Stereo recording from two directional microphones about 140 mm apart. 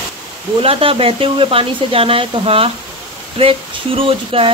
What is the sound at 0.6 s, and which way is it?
Speech, 40° right (ahead or behind).